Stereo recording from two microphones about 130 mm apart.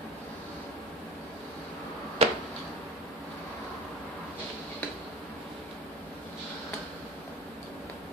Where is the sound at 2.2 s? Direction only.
50° right (ahead or behind).